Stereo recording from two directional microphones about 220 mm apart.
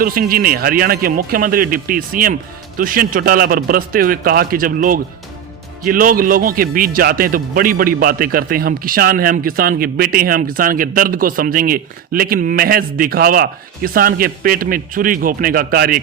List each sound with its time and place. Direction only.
0.0 s a man's voice: 40° right (ahead or behind)